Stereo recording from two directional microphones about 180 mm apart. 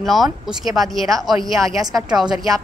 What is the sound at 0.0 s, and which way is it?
A woman's voice, centre (ahead or behind).